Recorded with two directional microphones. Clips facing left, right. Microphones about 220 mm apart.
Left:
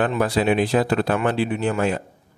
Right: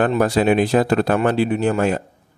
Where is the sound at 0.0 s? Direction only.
45° right (ahead or behind).